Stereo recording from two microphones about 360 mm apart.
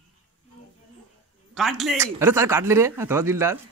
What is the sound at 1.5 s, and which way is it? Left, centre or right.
Speech, centre.